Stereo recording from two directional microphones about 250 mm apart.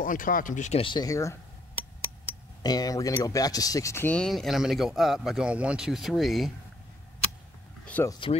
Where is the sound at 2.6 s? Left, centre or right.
Centre.